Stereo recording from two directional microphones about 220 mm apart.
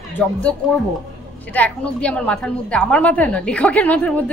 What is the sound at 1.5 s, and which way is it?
A woman's voice, 5° left (ahead or behind).